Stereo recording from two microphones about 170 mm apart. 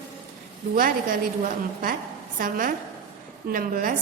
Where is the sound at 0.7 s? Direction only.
55° right (ahead or behind).